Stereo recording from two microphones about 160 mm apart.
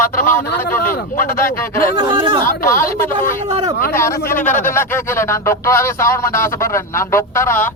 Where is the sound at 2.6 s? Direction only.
15° left (ahead or behind).